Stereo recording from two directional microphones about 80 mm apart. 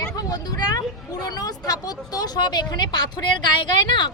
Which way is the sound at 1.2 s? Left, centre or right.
Left.